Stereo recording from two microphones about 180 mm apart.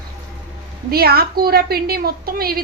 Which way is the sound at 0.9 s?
60° right (ahead or behind).